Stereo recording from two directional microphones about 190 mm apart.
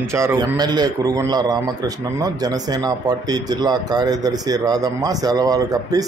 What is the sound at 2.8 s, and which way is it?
A man's voice, 20° right (ahead or behind).